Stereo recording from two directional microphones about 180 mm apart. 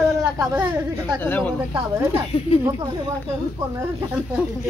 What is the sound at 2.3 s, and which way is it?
Speech, 30° left (ahead or behind).